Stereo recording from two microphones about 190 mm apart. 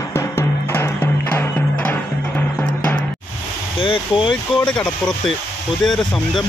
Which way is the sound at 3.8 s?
25° left (ahead or behind).